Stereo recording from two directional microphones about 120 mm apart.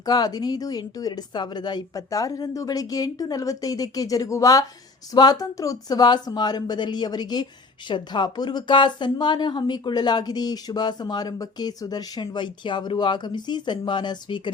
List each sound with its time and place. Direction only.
0.0 s speech: 35° left (ahead or behind)